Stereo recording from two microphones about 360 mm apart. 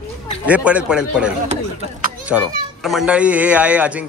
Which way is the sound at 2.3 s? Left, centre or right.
Centre.